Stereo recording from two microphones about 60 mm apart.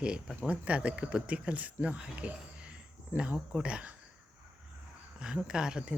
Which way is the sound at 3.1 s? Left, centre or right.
Right.